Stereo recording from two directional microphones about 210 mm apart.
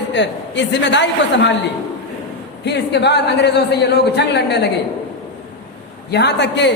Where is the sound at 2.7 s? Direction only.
55° left (ahead or behind).